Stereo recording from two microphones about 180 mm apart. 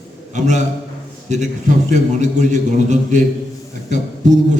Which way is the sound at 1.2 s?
40° right (ahead or behind).